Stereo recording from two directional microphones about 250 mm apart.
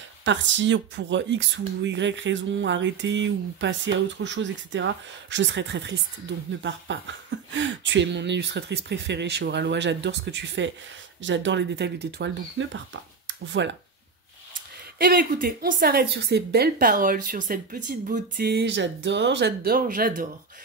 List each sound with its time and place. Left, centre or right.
0.2 s speech: right
15.0 s a woman's voice: right